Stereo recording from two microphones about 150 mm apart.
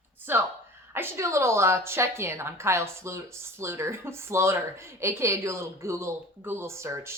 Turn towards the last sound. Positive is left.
turn(degrees=-20)  # may be behind; listen again after turning